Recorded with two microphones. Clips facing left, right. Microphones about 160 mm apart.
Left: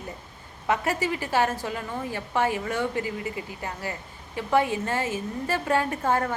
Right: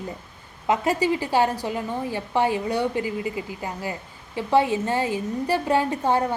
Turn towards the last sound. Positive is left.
turn(degrees=-15)  # may be behind; listen again after turning